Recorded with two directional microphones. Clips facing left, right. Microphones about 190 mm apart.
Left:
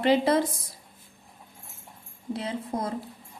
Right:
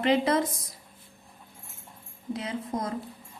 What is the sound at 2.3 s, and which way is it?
Speech, 30° left (ahead or behind).